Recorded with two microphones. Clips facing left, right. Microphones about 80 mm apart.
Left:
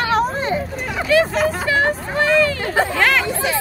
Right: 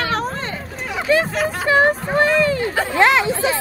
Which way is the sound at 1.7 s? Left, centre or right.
Right.